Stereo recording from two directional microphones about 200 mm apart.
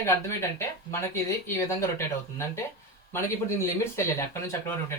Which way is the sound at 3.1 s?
15° left (ahead or behind).